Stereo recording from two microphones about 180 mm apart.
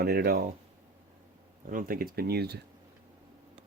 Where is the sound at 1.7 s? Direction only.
55° right (ahead or behind).